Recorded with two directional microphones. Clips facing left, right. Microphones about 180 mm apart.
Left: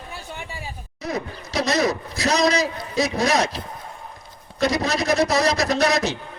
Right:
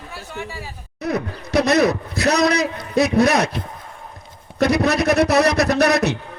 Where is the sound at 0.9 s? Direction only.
60° right (ahead or behind).